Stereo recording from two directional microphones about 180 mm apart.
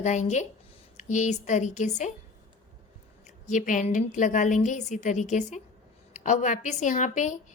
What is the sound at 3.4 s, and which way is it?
A woman's voice, 45° left (ahead or behind).